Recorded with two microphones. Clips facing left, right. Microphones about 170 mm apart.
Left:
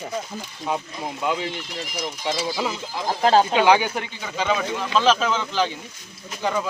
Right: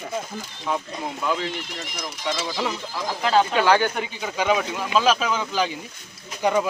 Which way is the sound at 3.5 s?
20° left (ahead or behind).